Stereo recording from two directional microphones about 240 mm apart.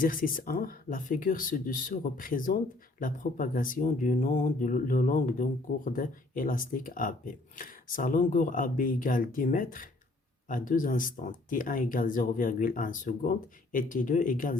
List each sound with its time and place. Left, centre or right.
0.0 s speech: left